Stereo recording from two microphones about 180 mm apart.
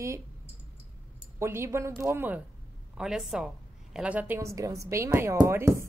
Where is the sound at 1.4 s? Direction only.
15° right (ahead or behind).